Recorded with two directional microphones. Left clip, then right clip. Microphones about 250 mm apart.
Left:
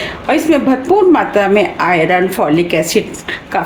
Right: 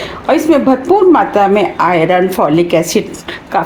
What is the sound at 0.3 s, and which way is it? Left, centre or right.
A woman's voice, centre.